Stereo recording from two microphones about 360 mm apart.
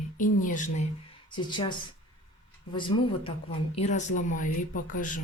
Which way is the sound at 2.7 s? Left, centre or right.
Centre.